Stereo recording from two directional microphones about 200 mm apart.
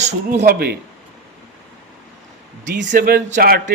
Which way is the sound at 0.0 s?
40° right (ahead or behind).